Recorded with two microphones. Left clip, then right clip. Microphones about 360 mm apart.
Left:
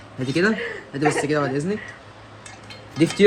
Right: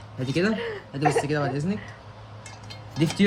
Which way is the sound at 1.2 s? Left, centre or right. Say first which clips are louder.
Left 5 dB; left.